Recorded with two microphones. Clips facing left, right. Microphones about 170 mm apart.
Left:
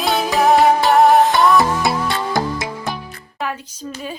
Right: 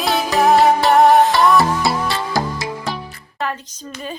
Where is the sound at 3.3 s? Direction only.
10° left (ahead or behind).